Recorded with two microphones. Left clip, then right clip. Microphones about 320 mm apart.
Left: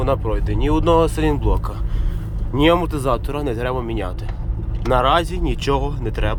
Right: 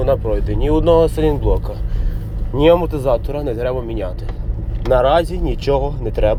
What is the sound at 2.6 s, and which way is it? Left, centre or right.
Speech, centre.